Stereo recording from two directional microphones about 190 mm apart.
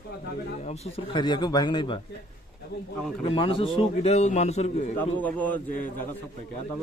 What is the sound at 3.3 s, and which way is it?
A man's voice, 30° left (ahead or behind).